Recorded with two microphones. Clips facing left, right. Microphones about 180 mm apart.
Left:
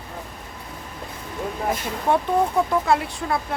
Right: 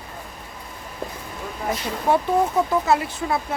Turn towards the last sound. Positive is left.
turn(degrees=0)  # may be behind; listen again after turning